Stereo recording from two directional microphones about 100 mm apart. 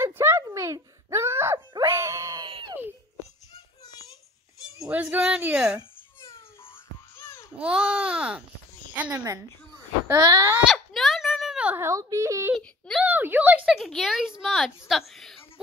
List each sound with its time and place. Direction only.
0.0 s a sound: 25° right (ahead or behind)
1.8 s wail: 30° right (ahead or behind)
2.4 s screaming: 50° right (ahead or behind)
4.8 s speech: 20° right (ahead or behind)
5.4 s babbling: 10° right (ahead or behind)
7.2 s babbling: 20° left (ahead or behind)
7.5 s babbling: 10° right (ahead or behind)
8.9 s a woman's voice: 15° right (ahead or behind)
10.1 s speech: 40° right (ahead or behind)
10.7 s a sound: centre (ahead or behind)
11.7 s a woman's voice: 30° right (ahead or behind)
12.5 s whimper: 5° left (ahead or behind)
13.0 s a sound: 20° right (ahead or behind)
13.7 s a woman's voice: centre (ahead or behind)